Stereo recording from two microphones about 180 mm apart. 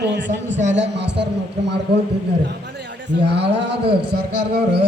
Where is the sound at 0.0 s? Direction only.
75° right (ahead or behind).